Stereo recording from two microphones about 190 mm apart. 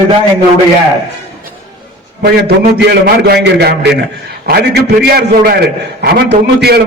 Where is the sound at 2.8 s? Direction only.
60° right (ahead or behind).